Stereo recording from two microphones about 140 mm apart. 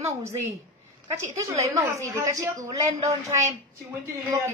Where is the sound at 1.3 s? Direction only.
20° right (ahead or behind).